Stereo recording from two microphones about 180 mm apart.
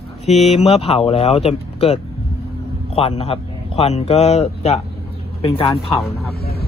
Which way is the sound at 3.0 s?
35° left (ahead or behind).